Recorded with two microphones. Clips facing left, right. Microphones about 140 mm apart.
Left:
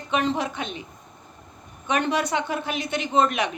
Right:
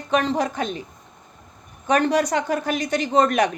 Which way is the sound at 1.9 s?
40° right (ahead or behind).